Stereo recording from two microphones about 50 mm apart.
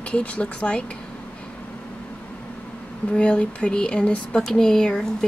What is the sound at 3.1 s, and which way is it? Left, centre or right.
A woman's voice, left.